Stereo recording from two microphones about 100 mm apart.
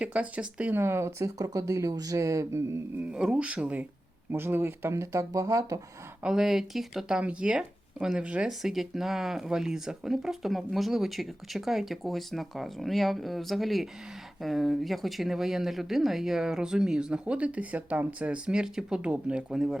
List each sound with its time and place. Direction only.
0.0 s speech: 10° right (ahead or behind); by 2.6 s 30° right (ahead or behind)
3.1 s speech: 10° right (ahead or behind); by 5.8 s 35° right (ahead or behind)
6.2 s speech: 5° right (ahead or behind)